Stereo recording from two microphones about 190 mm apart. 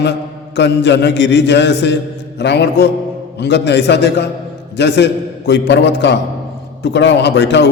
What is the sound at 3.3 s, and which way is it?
A man's voice, 65° left (ahead or behind).